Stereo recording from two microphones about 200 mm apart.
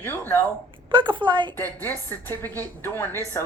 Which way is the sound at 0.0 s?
10° left (ahead or behind).